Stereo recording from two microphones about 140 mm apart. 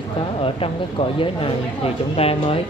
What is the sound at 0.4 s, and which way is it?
Speech, 40° left (ahead or behind).